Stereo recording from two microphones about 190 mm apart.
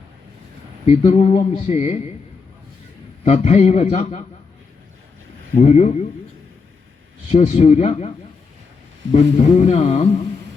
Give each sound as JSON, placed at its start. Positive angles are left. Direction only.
{"t": 0.9, "sound": "speech", "side_deg": 35}
{"t": 3.2, "sound": "speech", "side_deg": 40}
{"t": 5.5, "sound": "speech", "side_deg": 35}
{"t": 7.3, "sound": "speech", "side_deg": 35}
{"t": 9.1, "sound": "speech", "side_deg": 35}